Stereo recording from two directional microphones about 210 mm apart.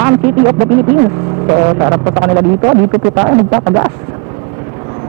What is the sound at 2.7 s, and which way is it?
A woman's voice, 25° right (ahead or behind).